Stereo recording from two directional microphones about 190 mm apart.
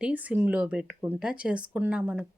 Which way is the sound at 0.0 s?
5° right (ahead or behind).